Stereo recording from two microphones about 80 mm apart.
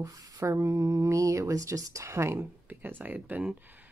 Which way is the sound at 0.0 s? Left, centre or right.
Right.